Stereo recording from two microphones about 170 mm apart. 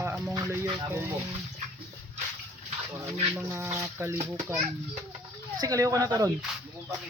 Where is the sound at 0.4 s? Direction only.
15° right (ahead or behind).